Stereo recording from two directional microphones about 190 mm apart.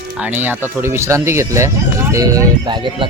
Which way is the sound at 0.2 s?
10° right (ahead or behind).